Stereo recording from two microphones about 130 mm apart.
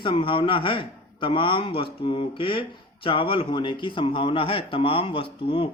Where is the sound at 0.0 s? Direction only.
40° left (ahead or behind).